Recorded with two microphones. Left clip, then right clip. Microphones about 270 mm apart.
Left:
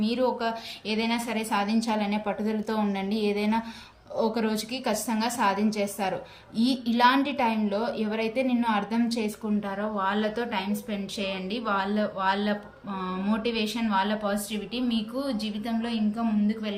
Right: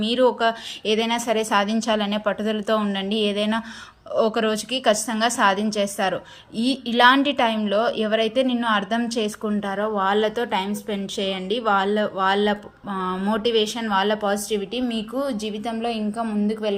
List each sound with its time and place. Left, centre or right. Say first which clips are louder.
0.0 s a woman's voice: right 7 dB; centre